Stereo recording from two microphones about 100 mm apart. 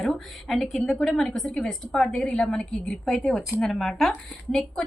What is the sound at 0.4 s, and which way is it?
A woman's voice, centre (ahead or behind).